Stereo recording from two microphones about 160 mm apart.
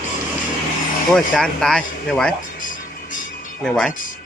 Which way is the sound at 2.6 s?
55° left (ahead or behind).